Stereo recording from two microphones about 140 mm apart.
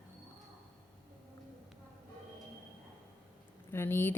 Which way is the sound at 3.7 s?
15° left (ahead or behind).